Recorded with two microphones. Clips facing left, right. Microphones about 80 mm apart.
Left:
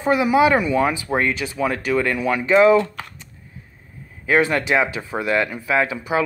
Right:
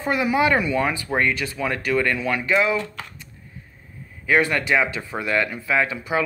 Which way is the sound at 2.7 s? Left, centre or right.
Left.